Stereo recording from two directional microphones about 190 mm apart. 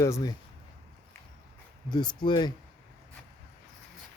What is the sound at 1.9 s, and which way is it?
Speech, 25° left (ahead or behind).